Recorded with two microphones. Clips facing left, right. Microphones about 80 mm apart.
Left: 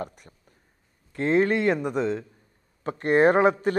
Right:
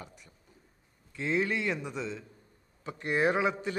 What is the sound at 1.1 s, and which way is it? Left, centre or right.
A man's voice, left.